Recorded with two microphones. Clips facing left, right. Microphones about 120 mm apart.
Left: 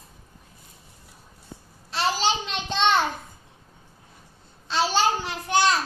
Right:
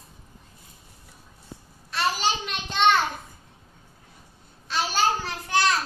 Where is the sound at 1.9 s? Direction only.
30° left (ahead or behind).